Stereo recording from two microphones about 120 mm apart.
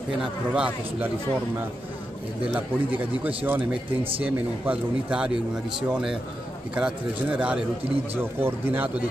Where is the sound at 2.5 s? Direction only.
15° right (ahead or behind).